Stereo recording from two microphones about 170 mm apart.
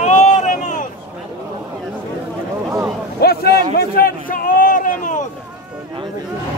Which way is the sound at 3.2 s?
70° left (ahead or behind).